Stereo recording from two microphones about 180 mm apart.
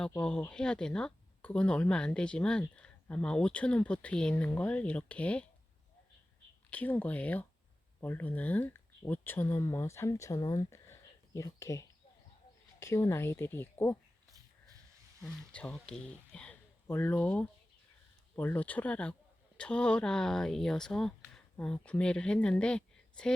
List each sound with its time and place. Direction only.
0.2 s speech: 5° left (ahead or behind)
6.7 s speech: 10° left (ahead or behind)
15.2 s speech: 5° left (ahead or behind)